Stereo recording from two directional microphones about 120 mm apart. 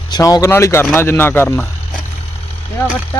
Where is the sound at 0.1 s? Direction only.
30° left (ahead or behind); by 1.6 s 15° left (ahead or behind).